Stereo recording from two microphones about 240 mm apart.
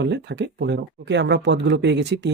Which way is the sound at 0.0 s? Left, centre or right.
Right.